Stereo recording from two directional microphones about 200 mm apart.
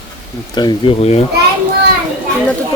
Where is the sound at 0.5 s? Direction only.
20° left (ahead or behind).